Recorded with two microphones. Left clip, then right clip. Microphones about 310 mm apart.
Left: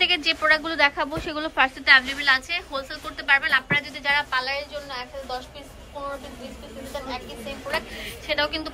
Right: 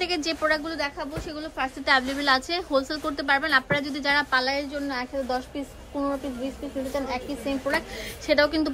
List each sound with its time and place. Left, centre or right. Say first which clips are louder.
0.0 s a woman's voice: left 5 dB; centre
1.9 s a woman's voice: left 3 dB; centre
8.3 s a woman's voice: right 4 dB; right